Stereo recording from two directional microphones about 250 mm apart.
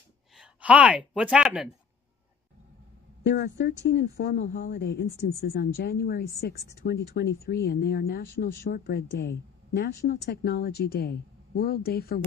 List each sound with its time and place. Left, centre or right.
0.4 s speech: centre
3.3 s a woman's voice: left